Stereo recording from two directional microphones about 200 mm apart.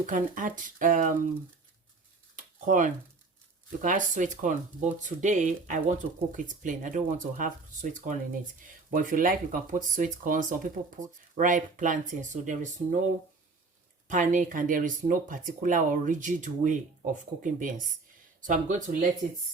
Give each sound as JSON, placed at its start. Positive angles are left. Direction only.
{"t": 0.0, "sound": "speech", "side_deg": -40}
{"t": 2.3, "sound": "a sound", "side_deg": -40}
{"t": 3.8, "sound": "speech", "side_deg": -40}
{"t": 14.1, "sound": "speech", "side_deg": -40}